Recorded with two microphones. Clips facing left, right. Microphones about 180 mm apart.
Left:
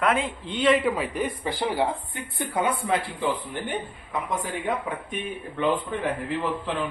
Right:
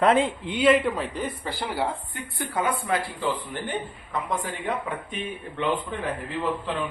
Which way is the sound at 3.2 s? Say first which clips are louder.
Left 1 dB; 15° left (ahead or behind).